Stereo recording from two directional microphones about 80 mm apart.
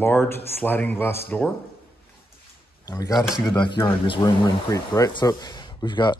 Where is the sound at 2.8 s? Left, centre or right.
Left.